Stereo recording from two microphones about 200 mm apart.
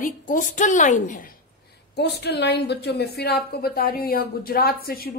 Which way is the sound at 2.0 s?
55° left (ahead or behind).